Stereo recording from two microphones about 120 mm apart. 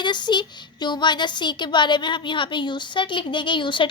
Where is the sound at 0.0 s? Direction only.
40° left (ahead or behind).